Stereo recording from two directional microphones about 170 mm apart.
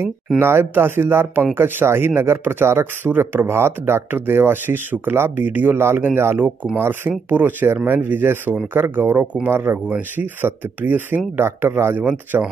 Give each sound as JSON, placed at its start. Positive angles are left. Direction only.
{"t": 0.4, "sound": "speech", "side_deg": -15}